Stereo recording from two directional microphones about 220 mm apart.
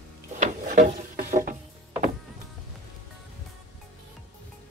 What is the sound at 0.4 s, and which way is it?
Drawer open or close, 35° right (ahead or behind).